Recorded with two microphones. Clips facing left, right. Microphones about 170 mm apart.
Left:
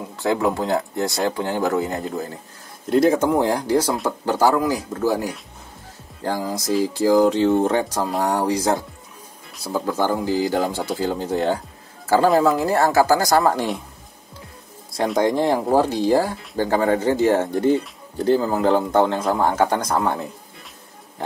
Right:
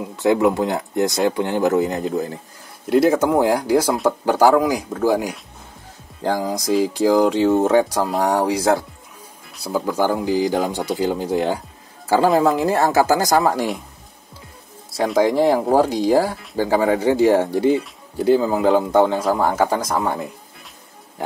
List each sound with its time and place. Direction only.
0.1 s a woman's voice: 20° right (ahead or behind)
2.9 s a woman's voice: 5° right (ahead or behind)
15.0 s speech: 5° right (ahead or behind)